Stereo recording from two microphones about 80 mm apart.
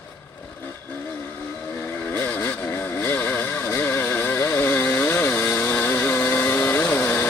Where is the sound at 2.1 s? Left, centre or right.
Left.